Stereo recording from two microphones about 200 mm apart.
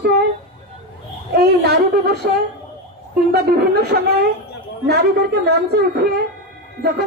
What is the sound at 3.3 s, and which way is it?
Speech, 50° right (ahead or behind).